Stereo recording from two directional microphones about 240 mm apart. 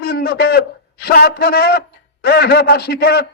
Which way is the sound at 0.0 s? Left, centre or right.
Left.